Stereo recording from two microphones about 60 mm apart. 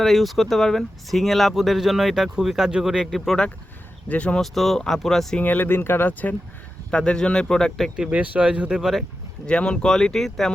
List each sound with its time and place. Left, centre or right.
0.0 s speech: centre
3.1 s speech: centre
4.1 s speech: left
4.4 s speech: centre
5.4 s speech: left
6.9 s speech: centre
7.9 s speech: centre
8.8 s speech: centre
9.5 s speech: centre